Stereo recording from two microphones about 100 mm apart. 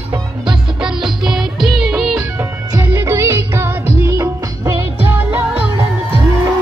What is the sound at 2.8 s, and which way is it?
Music of bollywood, 25° right (ahead or behind).